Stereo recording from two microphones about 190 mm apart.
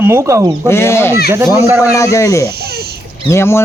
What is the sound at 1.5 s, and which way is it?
Speech, 10° right (ahead or behind).